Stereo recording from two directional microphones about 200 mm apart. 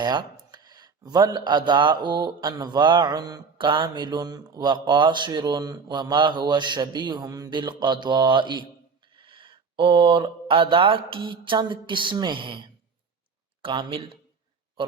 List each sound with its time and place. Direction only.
0.0 s speech: 20° right (ahead or behind)